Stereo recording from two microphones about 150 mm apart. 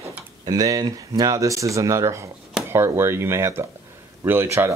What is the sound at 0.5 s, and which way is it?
Speech, 25° right (ahead or behind).